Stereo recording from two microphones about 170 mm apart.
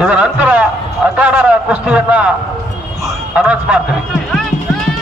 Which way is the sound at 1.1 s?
10° right (ahead or behind).